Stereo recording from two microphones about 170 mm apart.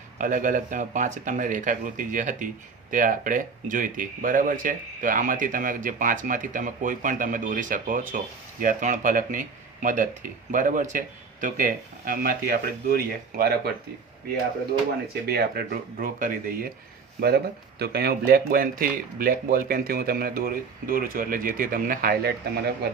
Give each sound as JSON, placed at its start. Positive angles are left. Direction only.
{"t": 0.2, "sound": "speech", "side_deg": -50}
{"t": 15.3, "sound": "speech", "side_deg": -70}